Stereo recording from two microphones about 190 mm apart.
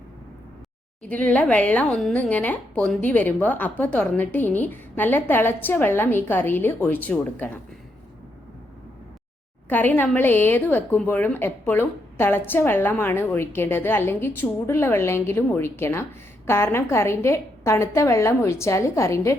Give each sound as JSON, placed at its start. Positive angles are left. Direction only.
{"t": 1.0, "sound": "speech", "side_deg": 5}
{"t": 9.6, "sound": "speech", "side_deg": 10}